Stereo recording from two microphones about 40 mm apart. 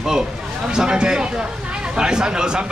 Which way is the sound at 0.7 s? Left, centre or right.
Right.